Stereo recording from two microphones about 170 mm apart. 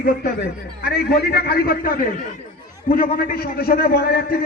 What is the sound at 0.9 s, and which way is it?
A man's voice, 65° left (ahead or behind).